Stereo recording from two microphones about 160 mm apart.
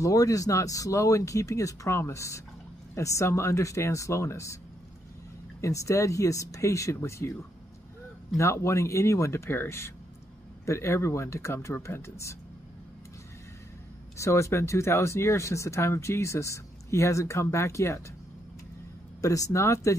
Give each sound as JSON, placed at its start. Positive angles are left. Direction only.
{"t": 0.0, "sound": "speech", "side_deg": 20}
{"t": 5.6, "sound": "speech", "side_deg": 20}
{"t": 8.4, "sound": "speech", "side_deg": 20}
{"t": 14.1, "sound": "speech", "side_deg": 20}
{"t": 19.2, "sound": "speech", "side_deg": 20}